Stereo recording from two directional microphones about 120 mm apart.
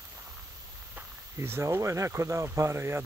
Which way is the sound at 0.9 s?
20° right (ahead or behind).